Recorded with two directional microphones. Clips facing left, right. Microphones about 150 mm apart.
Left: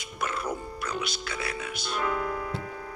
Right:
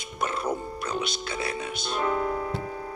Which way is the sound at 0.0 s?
25° right (ahead or behind).